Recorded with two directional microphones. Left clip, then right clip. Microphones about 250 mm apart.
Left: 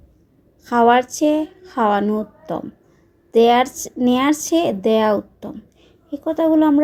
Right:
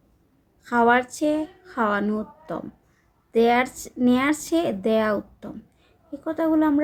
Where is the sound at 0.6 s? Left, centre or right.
Centre.